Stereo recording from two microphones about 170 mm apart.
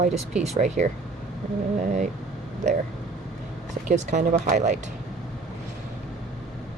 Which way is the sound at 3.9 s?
45° right (ahead or behind).